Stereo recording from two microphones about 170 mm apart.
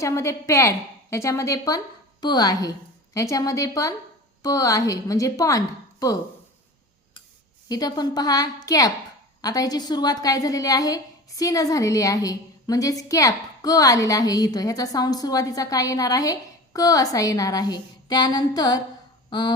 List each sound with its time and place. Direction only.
0.0 s a woman's voice: 20° left (ahead or behind)
7.7 s a woman's voice: 25° left (ahead or behind)
19.3 s honk: 25° left (ahead or behind)